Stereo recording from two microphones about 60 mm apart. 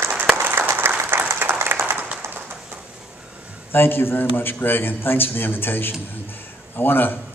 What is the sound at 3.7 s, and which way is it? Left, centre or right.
A man's voice, left.